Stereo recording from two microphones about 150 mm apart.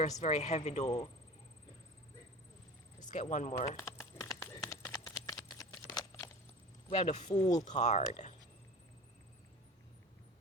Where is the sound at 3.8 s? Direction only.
20° left (ahead or behind).